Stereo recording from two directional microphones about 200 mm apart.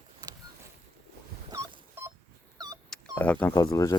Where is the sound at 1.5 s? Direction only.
15° right (ahead or behind).